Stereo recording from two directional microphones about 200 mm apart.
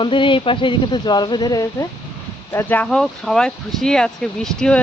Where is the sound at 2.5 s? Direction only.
10° left (ahead or behind).